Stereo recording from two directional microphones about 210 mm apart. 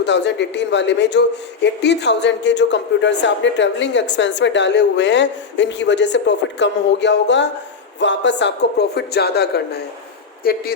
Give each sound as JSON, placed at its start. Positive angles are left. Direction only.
{"t": 0.0, "sound": "a man's voice", "side_deg": 55}